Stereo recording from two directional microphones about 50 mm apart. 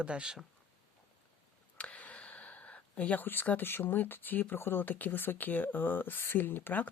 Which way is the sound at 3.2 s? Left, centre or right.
Left.